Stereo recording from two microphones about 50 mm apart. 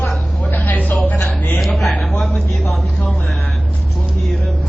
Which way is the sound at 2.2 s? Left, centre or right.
Left.